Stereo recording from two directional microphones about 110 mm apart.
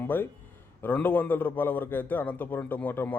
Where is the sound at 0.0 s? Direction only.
20° left (ahead or behind).